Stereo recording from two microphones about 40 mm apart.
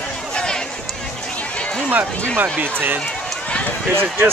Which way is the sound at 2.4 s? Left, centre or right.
Right.